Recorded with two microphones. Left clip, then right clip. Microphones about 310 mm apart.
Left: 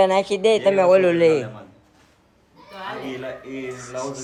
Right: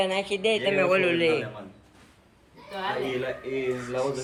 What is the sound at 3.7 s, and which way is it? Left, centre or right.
Speech, centre.